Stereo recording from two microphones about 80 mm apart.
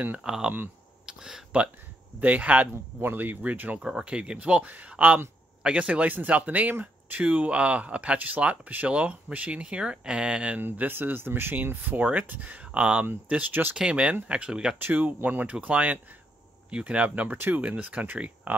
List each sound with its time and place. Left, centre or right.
0.2 s speech: centre
1.0 s a sound: centre
2.1 s speech: centre
3.8 s speech: centre
10.6 s speech: right
13.7 s speech: centre
14.8 s speech: right